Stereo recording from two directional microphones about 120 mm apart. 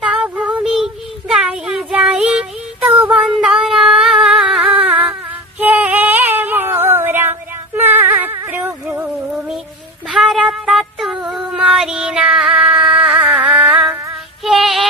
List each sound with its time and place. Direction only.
0.0 s child singing: 5° right (ahead or behind)
5.5 s a sound: 15° right (ahead or behind)
10.1 s child singing: centre (ahead or behind)